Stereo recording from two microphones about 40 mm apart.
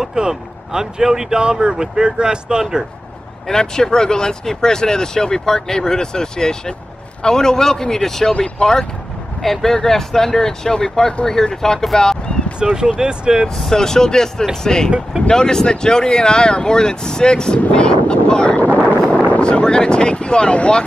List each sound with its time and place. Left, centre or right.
0.0 s speech: centre
3.4 s speech: centre
9.4 s speech: centre
12.7 s speech: centre
13.6 s speech: centre
17.7 s wind noise: left
18.6 s wind noise: left
19.4 s speech: left